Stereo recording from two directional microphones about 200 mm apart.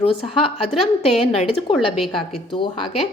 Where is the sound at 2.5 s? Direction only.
25° left (ahead or behind).